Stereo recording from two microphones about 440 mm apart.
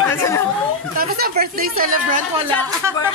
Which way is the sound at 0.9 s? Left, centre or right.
Right.